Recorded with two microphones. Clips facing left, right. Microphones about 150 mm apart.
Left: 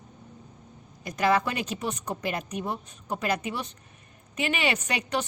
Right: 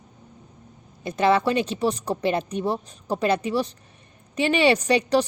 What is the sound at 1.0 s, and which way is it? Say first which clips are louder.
A woman's voice: right 4 dB; 25° right (ahead or behind).